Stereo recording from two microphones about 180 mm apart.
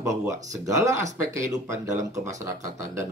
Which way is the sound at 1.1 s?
15° right (ahead or behind).